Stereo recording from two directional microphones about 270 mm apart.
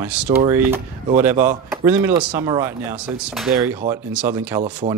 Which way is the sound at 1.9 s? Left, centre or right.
Centre.